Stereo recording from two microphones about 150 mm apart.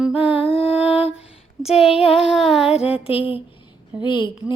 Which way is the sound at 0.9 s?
40° left (ahead or behind).